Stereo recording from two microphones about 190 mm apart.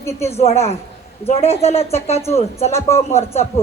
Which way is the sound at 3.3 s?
35° left (ahead or behind).